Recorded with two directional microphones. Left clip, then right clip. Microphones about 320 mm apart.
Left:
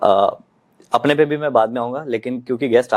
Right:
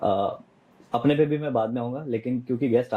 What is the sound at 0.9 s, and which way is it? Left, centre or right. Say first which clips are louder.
Speech: left 7 dB; centre.